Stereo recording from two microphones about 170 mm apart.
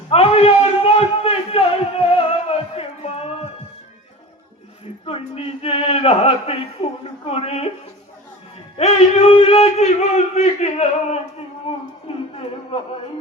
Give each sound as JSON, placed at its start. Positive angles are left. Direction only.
{"t": 0.1, "sound": "a sound", "side_deg": 35}
{"t": 5.0, "sound": "speech", "side_deg": 35}
{"t": 8.8, "sound": "a man's voice", "side_deg": 40}
{"t": 12.0, "sound": "music", "side_deg": 35}